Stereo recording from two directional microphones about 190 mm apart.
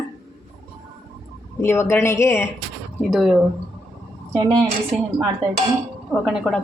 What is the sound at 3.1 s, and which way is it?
Speech, centre (ahead or behind).